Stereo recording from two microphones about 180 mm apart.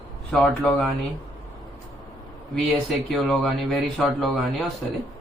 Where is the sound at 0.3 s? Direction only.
Centre (ahead or behind).